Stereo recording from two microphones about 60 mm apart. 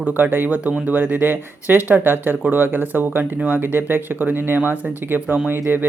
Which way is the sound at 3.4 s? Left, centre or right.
Centre.